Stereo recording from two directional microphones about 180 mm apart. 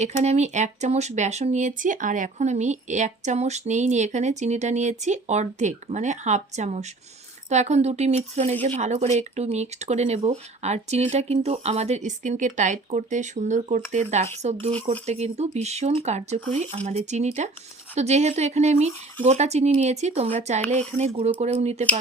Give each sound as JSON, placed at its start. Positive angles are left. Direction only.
{"t": 0.0, "sound": "speech", "side_deg": -40}